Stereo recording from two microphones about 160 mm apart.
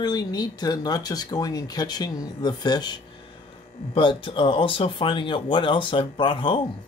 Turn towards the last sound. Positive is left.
turn(degrees=30)  # may be behind; listen again after turning